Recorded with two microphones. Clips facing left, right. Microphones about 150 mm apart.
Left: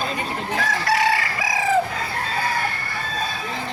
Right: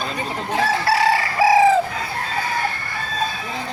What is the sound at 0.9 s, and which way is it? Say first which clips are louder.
Chicken: even; 30° right (ahead or behind).